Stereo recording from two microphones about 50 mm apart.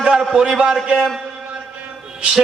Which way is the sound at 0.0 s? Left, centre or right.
Centre.